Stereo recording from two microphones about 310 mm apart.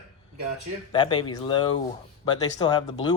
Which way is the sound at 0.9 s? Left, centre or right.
Centre.